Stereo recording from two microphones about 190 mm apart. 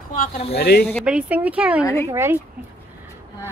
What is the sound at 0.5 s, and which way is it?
Speech, 60° left (ahead or behind).